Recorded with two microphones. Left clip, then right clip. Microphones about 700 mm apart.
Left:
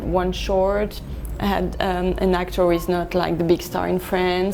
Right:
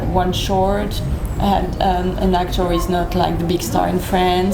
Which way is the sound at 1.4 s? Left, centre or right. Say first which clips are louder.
Right 5 dB; left.